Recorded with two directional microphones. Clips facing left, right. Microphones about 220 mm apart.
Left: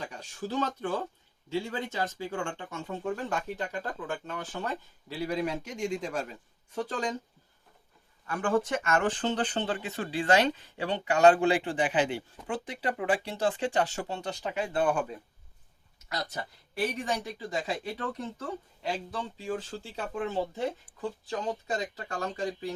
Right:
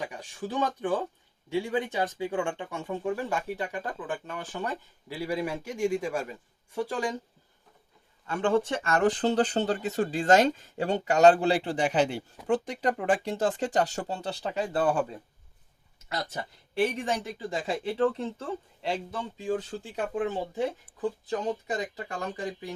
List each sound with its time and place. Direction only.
0.0 s speech: 15° right (ahead or behind)
8.3 s speech: 25° right (ahead or behind)
16.0 s speech: 30° right (ahead or behind)
21.2 s speech: 20° right (ahead or behind)